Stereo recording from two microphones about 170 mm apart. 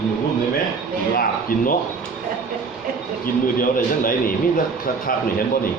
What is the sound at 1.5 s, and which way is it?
Speech, 55° left (ahead or behind).